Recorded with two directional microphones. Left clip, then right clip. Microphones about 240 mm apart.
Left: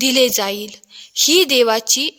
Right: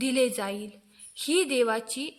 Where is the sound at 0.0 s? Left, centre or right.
Left.